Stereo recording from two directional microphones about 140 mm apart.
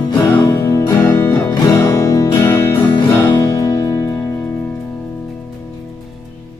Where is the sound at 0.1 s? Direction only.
15° left (ahead or behind).